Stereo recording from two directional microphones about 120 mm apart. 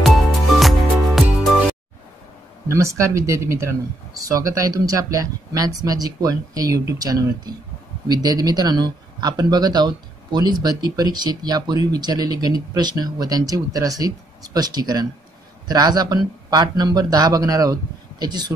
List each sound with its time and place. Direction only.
0.0 s music: centre (ahead or behind)
2.7 s speech: 25° right (ahead or behind)